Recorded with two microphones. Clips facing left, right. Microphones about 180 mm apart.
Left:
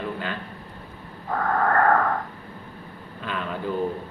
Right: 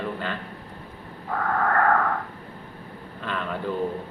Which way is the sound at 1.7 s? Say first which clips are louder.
Left 2 dB; 35° left (ahead or behind).